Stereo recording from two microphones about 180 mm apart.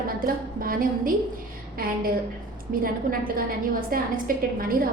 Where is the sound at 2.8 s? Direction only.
50° right (ahead or behind).